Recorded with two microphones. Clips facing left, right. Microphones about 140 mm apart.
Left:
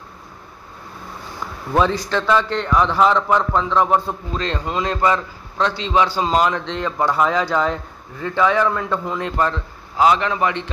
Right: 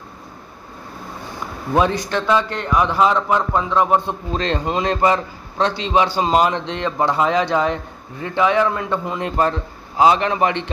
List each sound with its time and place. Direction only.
2.0 s a man's voice: 15° right (ahead or behind)